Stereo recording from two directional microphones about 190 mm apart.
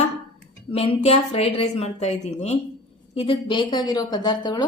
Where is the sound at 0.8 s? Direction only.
30° left (ahead or behind).